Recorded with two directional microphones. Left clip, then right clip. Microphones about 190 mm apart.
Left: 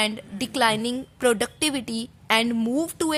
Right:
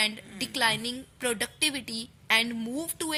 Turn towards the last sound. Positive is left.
turn(degrees=50)  # may be behind; listen again after turning